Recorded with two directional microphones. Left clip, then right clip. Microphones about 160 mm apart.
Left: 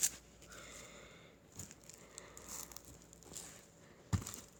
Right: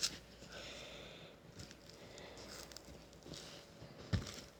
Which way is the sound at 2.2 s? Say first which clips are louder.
Left 1 dB; 20° left (ahead or behind).